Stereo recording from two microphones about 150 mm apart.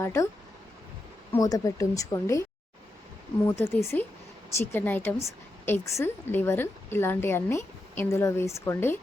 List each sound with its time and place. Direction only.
0.0 s a woman's voice: 15° left (ahead or behind)
1.3 s a woman's voice: 25° left (ahead or behind)
3.4 s a woman's voice: 15° left (ahead or behind)